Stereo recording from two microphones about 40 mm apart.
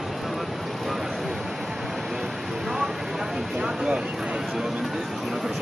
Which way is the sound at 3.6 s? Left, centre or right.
Centre.